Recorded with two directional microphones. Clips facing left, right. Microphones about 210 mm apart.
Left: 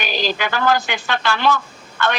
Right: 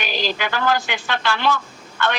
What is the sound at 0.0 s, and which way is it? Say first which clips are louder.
A man's voice: left 2 dB; 45° left (ahead or behind).